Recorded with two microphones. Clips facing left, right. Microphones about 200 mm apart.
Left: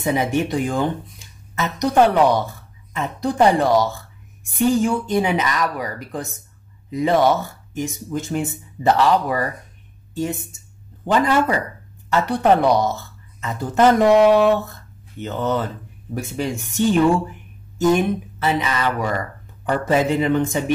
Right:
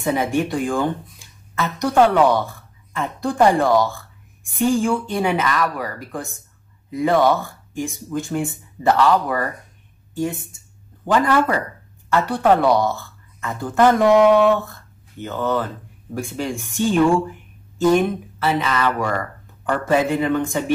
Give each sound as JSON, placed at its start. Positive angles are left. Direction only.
{"t": 0.0, "sound": "a woman's voice", "side_deg": 20}
{"t": 11.1, "sound": "a woman's voice", "side_deg": 20}